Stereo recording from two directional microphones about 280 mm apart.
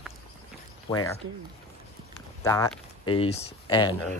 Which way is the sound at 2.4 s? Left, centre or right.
Centre.